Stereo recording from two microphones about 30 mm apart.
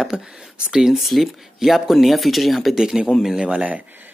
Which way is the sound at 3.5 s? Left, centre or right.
Right.